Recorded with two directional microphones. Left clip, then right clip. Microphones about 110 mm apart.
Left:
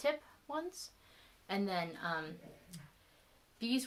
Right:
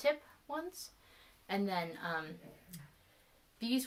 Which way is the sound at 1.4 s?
25° left (ahead or behind).